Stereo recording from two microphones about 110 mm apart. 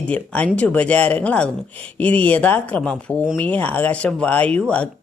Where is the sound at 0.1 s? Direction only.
10° left (ahead or behind).